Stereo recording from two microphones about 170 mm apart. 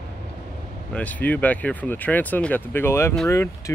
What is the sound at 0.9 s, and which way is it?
Speech, 10° left (ahead or behind).